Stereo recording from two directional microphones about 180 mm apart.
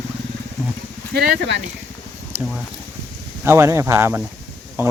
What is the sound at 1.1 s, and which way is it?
Speech, 60° right (ahead or behind).